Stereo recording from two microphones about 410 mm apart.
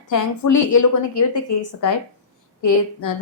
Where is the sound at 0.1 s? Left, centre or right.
Left.